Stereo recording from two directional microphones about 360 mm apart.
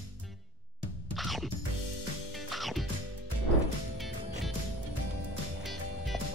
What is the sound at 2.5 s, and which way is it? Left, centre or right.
Music, centre.